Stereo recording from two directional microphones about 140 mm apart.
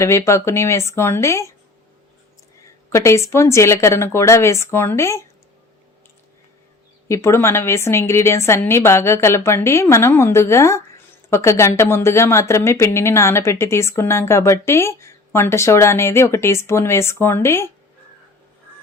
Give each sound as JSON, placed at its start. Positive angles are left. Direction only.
{"t": 0.0, "sound": "speech", "side_deg": 20}
{"t": 2.9, "sound": "speech", "side_deg": 20}
{"t": 7.1, "sound": "speech", "side_deg": 20}